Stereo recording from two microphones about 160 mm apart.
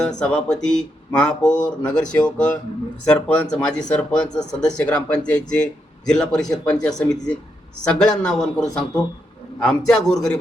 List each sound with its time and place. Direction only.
0.0 s speech: 5° left (ahead or behind)